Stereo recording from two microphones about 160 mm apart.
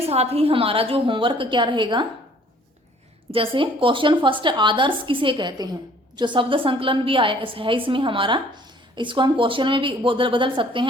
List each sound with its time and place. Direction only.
0.1 s a woman's voice: 40° right (ahead or behind)
3.3 s a woman's voice: 35° right (ahead or behind)